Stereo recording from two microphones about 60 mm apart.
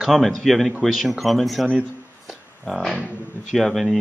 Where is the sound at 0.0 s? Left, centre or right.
Centre.